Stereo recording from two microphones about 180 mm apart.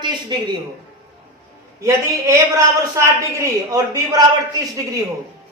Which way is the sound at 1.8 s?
15° right (ahead or behind).